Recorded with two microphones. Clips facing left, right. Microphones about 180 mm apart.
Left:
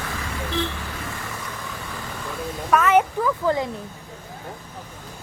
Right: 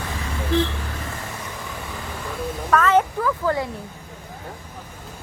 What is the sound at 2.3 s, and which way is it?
Speech, 10° left (ahead or behind).